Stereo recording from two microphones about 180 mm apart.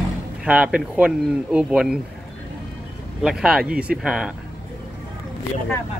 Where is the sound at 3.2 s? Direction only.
5° right (ahead or behind).